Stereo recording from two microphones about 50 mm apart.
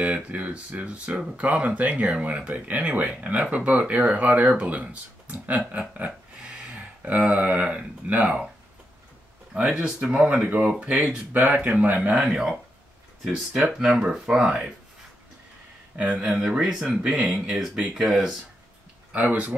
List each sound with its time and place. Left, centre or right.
0.0 s speech: right
6.7 s a sound: right
8.1 s speech: right
9.5 s speech: right
11.3 s speech: right
12.2 s speech: centre
13.7 s speech: centre
16.0 s speech: centre
19.1 s speech: right